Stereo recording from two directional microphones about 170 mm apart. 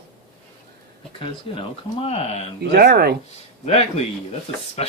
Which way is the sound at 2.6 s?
70° right (ahead or behind).